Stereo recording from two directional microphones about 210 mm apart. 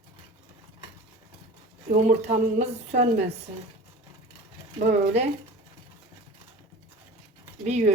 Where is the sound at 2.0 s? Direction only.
35° right (ahead or behind).